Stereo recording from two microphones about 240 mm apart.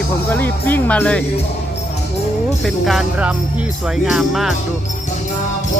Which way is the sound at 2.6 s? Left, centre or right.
Centre.